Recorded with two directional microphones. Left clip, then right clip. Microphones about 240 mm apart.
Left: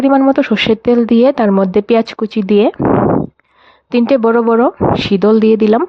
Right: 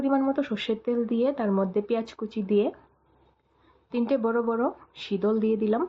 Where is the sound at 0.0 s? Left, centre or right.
Left.